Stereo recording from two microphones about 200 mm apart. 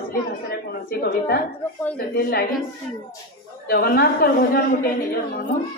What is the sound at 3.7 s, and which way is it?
A woman's voice, 50° left (ahead or behind).